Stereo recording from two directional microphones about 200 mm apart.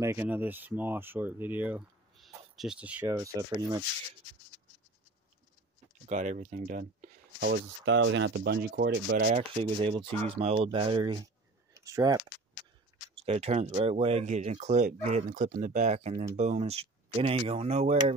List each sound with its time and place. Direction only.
0.0 s speech: 10° right (ahead or behind)
6.0 s speech: 35° right (ahead or behind); by 9.3 s 55° right (ahead or behind)
9.3 s speech: 30° right (ahead or behind)
13.1 s speech: 30° right (ahead or behind)